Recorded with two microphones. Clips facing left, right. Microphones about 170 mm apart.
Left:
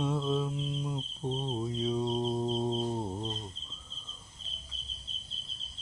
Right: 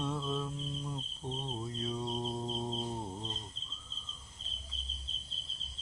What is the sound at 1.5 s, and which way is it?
Mantra, 15° left (ahead or behind).